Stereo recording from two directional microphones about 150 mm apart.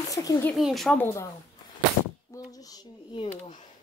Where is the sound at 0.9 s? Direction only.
15° left (ahead or behind).